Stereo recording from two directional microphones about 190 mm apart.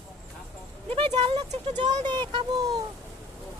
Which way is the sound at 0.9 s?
30° right (ahead or behind).